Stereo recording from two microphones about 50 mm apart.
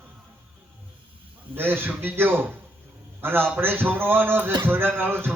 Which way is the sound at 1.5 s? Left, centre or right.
Right.